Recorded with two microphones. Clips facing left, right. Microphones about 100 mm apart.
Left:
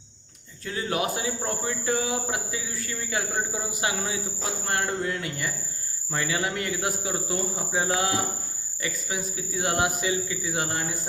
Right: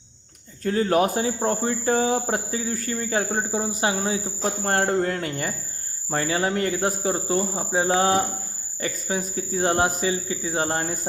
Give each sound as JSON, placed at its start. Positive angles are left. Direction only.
{"t": 0.6, "sound": "a man's voice", "side_deg": -40}
{"t": 4.6, "sound": "a man's voice", "side_deg": -45}